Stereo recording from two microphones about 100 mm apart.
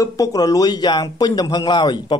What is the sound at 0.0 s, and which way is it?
A man's voice, 35° left (ahead or behind).